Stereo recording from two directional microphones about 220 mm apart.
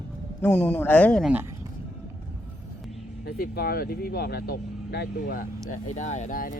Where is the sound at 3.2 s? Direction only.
45° left (ahead or behind).